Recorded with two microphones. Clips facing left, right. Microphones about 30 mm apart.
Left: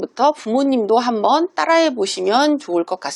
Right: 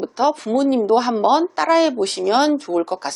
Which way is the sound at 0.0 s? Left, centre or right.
Centre.